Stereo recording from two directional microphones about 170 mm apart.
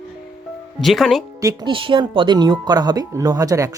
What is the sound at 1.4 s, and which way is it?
Speech, 30° right (ahead or behind).